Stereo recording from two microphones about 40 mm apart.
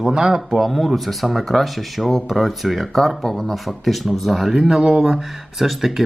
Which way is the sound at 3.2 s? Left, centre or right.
Centre.